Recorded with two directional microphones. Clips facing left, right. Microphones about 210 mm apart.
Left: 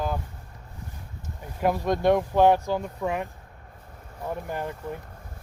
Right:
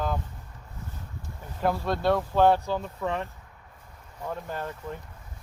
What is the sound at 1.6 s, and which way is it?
Speech, 15° left (ahead or behind).